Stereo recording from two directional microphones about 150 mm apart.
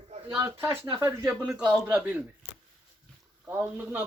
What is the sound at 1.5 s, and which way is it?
Speech, 5° right (ahead or behind).